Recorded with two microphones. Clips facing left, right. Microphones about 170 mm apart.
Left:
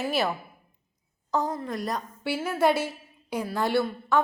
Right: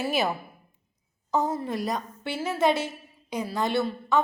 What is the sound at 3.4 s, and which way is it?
Speech, 20° right (ahead or behind).